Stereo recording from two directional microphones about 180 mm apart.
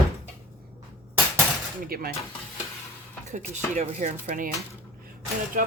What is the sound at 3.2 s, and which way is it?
Speech, 40° right (ahead or behind).